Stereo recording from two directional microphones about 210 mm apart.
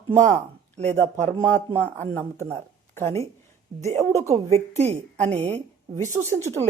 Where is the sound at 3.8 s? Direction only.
35° right (ahead or behind).